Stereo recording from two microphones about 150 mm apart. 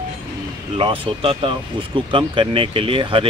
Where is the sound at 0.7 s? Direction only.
35° right (ahead or behind).